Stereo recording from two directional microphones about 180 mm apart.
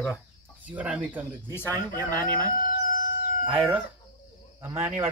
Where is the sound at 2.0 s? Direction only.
10° left (ahead or behind).